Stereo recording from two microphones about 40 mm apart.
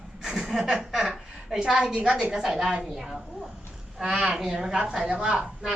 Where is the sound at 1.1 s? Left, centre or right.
Centre.